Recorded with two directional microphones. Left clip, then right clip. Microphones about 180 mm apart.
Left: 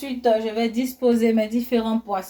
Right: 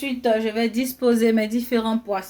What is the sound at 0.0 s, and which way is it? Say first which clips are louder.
A woman's voice: left 1 dB; 55° right (ahead or behind).